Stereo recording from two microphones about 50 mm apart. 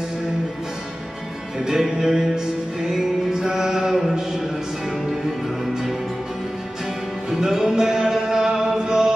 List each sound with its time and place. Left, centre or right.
1.6 s music: centre
7.2 s music: centre